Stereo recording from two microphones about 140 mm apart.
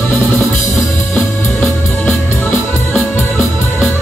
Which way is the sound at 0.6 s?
15° left (ahead or behind).